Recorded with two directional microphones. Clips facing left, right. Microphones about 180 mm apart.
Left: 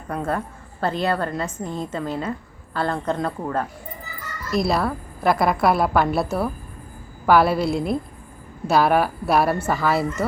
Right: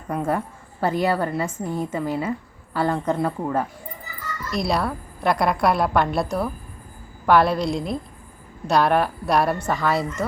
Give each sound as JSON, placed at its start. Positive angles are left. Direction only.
{"t": 0.1, "sound": "a woman's voice", "side_deg": -10}
{"t": 4.5, "sound": "a woman's voice", "side_deg": 0}